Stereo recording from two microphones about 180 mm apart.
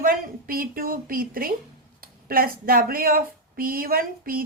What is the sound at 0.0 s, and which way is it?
A woman's voice, 55° right (ahead or behind).